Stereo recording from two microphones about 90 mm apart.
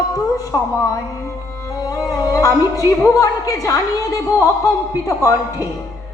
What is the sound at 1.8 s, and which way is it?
Music, 40° left (ahead or behind).